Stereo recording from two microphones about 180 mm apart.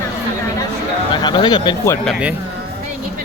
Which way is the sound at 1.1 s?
25° left (ahead or behind).